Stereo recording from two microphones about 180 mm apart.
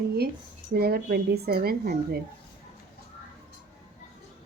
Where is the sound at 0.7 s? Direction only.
60° right (ahead or behind).